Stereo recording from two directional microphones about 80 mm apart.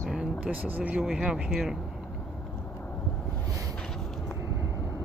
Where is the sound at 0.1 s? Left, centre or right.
Centre.